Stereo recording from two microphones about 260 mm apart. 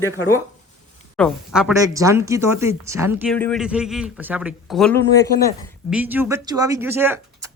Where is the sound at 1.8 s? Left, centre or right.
Centre.